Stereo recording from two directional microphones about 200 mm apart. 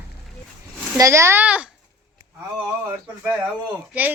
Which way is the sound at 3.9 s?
10° right (ahead or behind).